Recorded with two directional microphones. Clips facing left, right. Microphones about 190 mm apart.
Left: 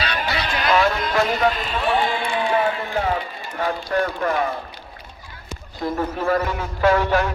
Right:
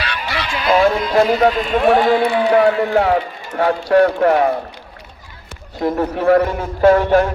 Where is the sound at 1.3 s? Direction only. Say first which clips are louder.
Right 6 dB; 40° right (ahead or behind).